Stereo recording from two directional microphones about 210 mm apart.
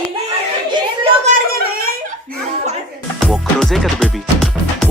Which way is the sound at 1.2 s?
45° right (ahead or behind).